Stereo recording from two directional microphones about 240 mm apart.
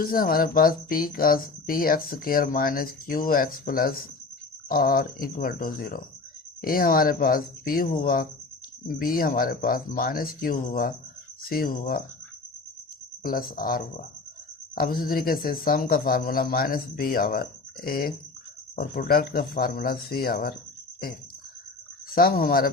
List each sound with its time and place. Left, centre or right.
0.0 s speech: left
13.2 s speech: left
22.1 s speech: left